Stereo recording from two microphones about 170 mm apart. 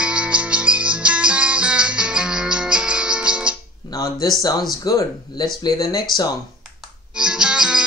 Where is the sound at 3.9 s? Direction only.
20° left (ahead or behind).